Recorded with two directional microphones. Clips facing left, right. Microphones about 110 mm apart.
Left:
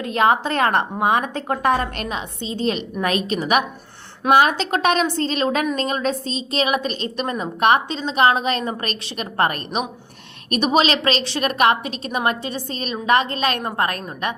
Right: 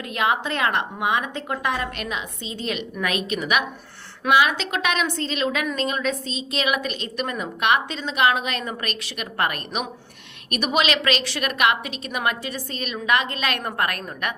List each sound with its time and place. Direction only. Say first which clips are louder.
0.0 s a woman's voice: left 5 dB; 35° left (ahead or behind)